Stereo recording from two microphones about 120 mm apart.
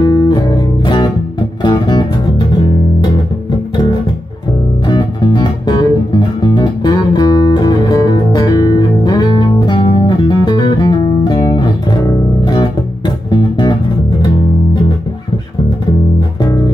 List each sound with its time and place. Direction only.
0.0 s music: 35° left (ahead or behind)
4.8 s music: 40° left (ahead or behind)
13.3 s music: 40° left (ahead or behind)